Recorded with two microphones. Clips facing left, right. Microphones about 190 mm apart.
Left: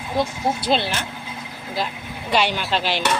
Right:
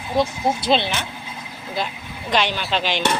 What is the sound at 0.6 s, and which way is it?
Speech, 25° right (ahead or behind).